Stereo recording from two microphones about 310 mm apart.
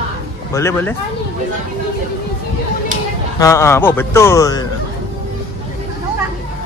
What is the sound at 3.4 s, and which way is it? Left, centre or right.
A man's voice, centre.